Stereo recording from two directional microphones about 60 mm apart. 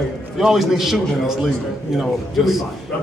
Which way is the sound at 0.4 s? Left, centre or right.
Centre.